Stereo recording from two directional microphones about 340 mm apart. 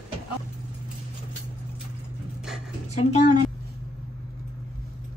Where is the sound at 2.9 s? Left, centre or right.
Centre.